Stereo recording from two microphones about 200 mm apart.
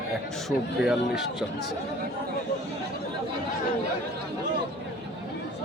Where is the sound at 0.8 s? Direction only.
5° right (ahead or behind).